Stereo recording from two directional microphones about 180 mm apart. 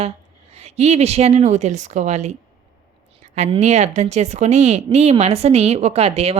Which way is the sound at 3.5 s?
40° right (ahead or behind).